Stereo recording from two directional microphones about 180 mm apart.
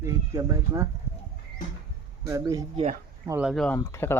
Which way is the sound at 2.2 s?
20° right (ahead or behind).